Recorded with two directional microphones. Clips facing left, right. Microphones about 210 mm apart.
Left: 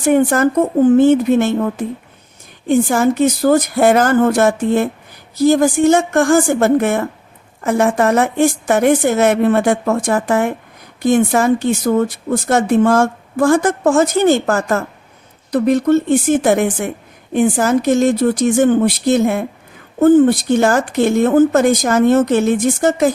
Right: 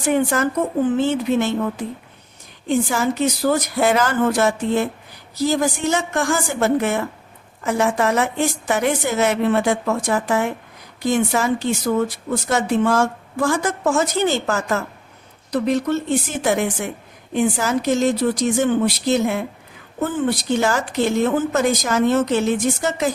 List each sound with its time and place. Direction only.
0.0 s a woman's voice: 50° left (ahead or behind)